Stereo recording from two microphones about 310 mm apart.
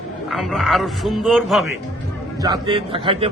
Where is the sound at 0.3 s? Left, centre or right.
Centre.